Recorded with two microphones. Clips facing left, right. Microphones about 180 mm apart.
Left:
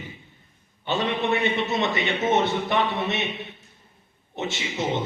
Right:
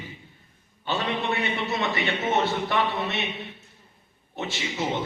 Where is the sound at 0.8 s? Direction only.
20° left (ahead or behind).